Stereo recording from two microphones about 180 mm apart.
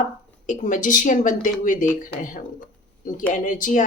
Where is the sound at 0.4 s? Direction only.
45° left (ahead or behind).